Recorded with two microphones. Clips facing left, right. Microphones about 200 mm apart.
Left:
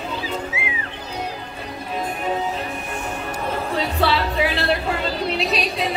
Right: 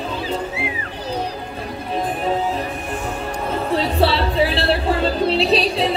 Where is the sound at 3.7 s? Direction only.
30° right (ahead or behind).